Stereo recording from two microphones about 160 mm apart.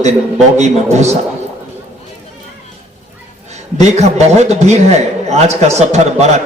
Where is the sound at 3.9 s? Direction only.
45° right (ahead or behind).